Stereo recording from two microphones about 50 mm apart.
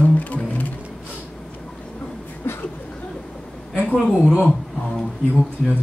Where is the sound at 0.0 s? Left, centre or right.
Left.